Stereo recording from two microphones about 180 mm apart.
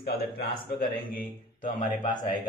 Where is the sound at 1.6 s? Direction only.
45° left (ahead or behind).